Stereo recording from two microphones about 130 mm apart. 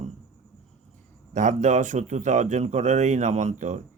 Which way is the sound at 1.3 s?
70° right (ahead or behind).